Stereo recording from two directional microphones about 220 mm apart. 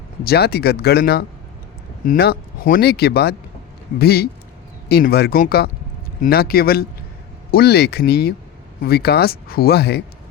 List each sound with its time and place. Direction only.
0.3 s speech: 45° left (ahead or behind)